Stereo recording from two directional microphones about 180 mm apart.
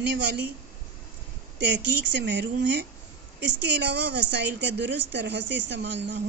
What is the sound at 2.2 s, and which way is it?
A woman's voice, 75° right (ahead or behind).